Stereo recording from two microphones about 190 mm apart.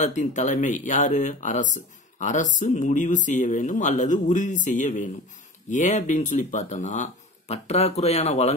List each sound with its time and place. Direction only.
0.0 s speech: 40° left (ahead or behind)